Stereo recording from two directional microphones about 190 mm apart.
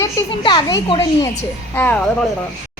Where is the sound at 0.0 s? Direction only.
25° left (ahead or behind).